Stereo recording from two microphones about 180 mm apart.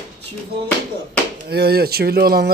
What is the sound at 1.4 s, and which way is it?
Speech, 60° right (ahead or behind).